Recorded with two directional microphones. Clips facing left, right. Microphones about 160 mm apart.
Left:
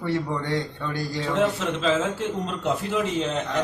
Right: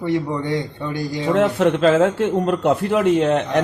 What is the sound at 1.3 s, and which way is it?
A man's voice, 60° right (ahead or behind).